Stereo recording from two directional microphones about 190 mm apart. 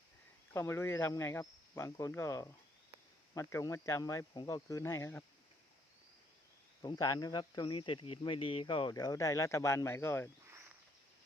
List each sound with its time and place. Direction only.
0.5 s speech: 15° left (ahead or behind)
6.8 s speech: 20° left (ahead or behind)